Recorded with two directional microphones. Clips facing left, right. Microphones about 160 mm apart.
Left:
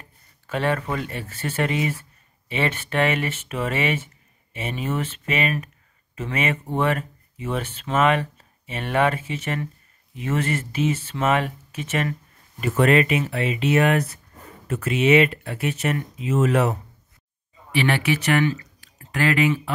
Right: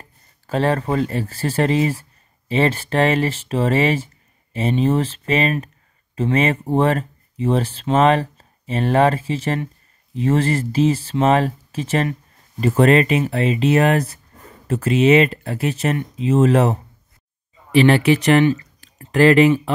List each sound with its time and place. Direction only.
0.5 s speech: 35° right (ahead or behind)
17.8 s speech: 30° right (ahead or behind)